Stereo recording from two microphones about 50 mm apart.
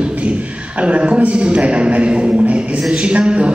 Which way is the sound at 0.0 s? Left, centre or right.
Right.